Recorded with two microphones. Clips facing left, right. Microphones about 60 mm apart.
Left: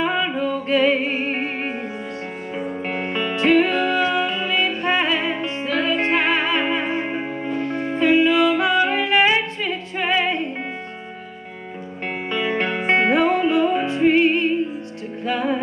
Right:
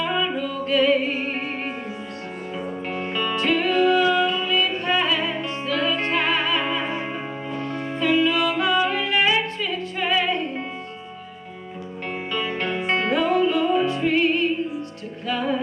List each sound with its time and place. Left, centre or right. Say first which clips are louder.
0.0 s music: left 3 dB; left
2.9 s music: even; left
12.1 s music: left 4 dB; left